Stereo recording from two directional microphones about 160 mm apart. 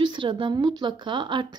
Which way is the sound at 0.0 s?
30° right (ahead or behind).